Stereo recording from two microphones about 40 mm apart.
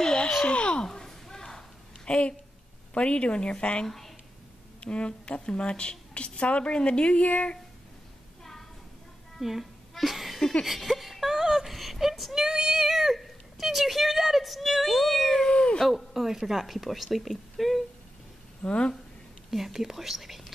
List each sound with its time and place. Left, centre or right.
0.0 s a sound: centre
0.6 s a woman's voice: left
0.8 s a sound: centre
2.0 s a woman's voice: left
3.8 s speech: centre
4.7 s a woman's voice: left
9.4 s a sound: centre
10.6 s whimper: centre
12.4 s a sound: centre
15.4 s cat: left
15.8 s a woman's voice: centre
18.6 s a woman's voice: left
19.5 s a woman's voice: centre